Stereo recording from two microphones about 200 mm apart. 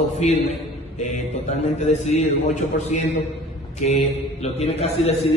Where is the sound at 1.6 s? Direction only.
35° left (ahead or behind).